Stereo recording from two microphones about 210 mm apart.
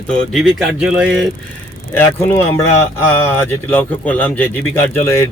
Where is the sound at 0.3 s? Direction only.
Centre (ahead or behind).